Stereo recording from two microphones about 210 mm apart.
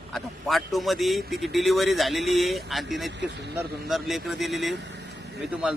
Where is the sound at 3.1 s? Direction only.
55° right (ahead or behind).